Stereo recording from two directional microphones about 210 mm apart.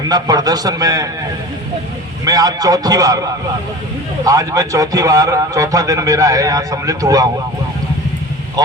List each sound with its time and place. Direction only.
0.1 s a man's voice: 20° right (ahead or behind)
2.2 s a man's voice: 15° right (ahead or behind)
4.3 s a man's voice: 15° right (ahead or behind)
8.6 s speech: 20° right (ahead or behind)